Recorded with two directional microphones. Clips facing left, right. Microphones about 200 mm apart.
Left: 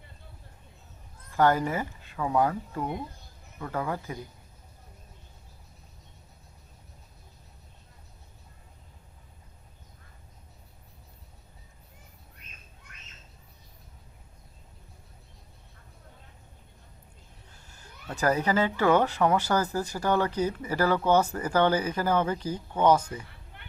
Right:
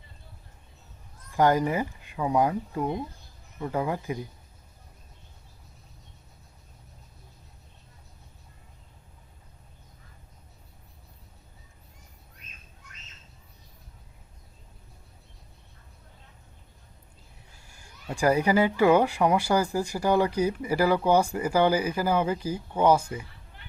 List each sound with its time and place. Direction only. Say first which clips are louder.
1.3 s speech: right 1 dB; 15° right (ahead or behind)
17.5 s speech: left 2 dB; 10° right (ahead or behind)